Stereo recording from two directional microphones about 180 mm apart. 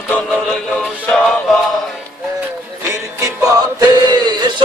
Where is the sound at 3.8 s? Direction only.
25° right (ahead or behind).